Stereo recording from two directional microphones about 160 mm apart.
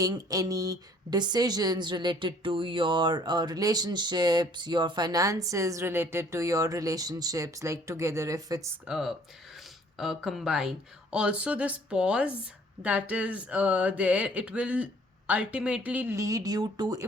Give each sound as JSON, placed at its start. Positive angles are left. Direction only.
{"t": 0.0, "sound": "speech", "side_deg": -20}
{"t": 8.9, "sound": "speech", "side_deg": -5}